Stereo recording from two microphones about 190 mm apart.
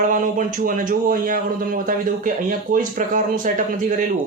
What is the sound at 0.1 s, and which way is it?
Speech, 45° right (ahead or behind).